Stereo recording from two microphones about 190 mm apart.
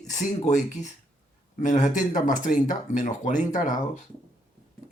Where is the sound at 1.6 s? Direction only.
40° left (ahead or behind).